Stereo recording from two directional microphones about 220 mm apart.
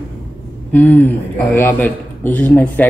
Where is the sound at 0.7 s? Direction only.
5° left (ahead or behind).